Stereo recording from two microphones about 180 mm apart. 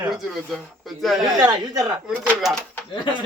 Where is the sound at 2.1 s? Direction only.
Centre (ahead or behind).